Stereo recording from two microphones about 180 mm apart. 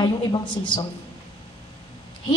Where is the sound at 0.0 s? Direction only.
25° left (ahead or behind).